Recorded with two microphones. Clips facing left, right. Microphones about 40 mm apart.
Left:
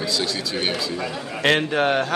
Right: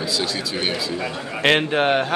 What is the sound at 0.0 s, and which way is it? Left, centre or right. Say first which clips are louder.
Speech: even; centre.